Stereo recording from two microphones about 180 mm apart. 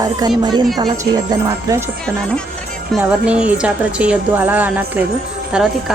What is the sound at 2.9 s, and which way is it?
Speech, 5° right (ahead or behind).